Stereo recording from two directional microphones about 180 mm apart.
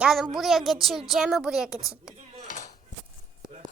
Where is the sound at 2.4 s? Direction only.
45° left (ahead or behind).